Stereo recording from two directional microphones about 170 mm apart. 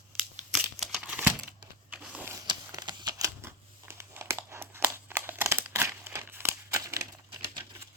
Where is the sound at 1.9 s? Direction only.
5° right (ahead or behind).